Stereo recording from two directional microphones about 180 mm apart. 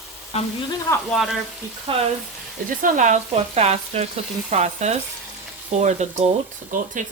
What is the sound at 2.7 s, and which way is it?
Speech, 45° right (ahead or behind).